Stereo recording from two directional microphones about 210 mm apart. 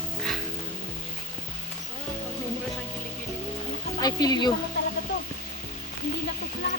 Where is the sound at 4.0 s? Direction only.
20° left (ahead or behind).